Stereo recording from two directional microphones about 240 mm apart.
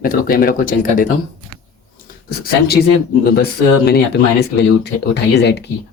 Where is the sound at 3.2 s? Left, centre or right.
Left.